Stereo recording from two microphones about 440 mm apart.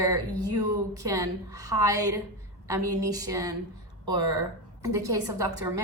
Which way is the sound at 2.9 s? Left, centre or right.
Centre.